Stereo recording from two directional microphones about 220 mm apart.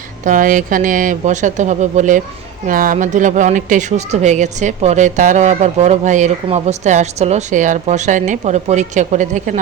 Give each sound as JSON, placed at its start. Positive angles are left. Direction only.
{"t": 0.3, "sound": "speech", "side_deg": -35}